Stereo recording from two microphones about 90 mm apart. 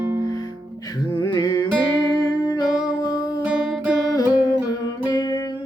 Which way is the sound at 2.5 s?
50° left (ahead or behind).